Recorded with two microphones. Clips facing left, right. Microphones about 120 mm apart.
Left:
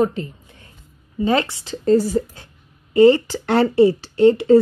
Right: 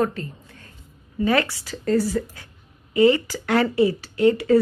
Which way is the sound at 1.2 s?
25° left (ahead or behind).